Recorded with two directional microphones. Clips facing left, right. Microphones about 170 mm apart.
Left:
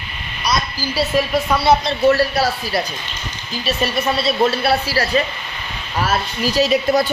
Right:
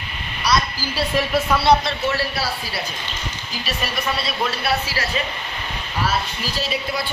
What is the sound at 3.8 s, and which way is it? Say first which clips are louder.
A woman's voice: left 7 dB; 30° left (ahead or behind).